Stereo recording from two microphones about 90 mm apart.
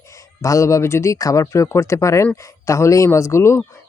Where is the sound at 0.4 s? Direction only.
35° left (ahead or behind).